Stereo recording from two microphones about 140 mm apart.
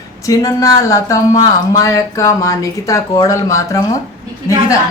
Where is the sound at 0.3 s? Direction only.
25° left (ahead or behind).